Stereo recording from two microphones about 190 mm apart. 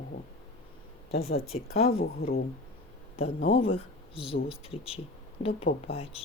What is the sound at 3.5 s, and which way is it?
Speech, 30° left (ahead or behind).